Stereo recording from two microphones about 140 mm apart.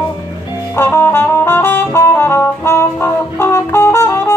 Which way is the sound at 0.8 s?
15° left (ahead or behind).